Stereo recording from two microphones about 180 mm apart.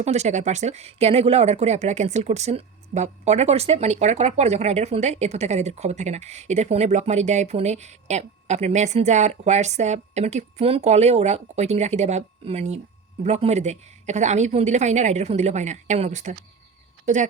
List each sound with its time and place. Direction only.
0.0 s speech: 40° right (ahead or behind)